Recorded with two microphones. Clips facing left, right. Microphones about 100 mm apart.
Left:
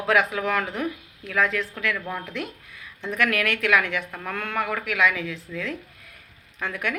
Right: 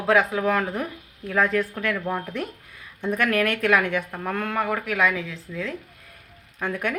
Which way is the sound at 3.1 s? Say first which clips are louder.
Right 1 dB; 35° right (ahead or behind).